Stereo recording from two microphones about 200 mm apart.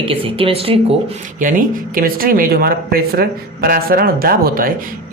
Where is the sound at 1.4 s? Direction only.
40° right (ahead or behind).